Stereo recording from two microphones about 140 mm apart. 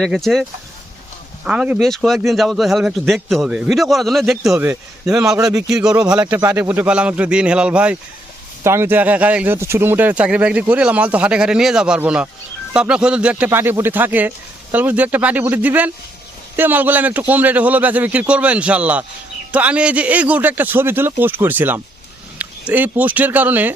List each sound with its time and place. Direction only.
0.0 s a man's voice: centre (ahead or behind)
1.5 s a man's voice: 10° right (ahead or behind)
4.5 s speech: 15° right (ahead or behind)
5.0 s a man's voice: 5° right (ahead or behind)
5.4 s a man's voice: 25° right (ahead or behind)
5.6 s a man's voice: 5° right (ahead or behind)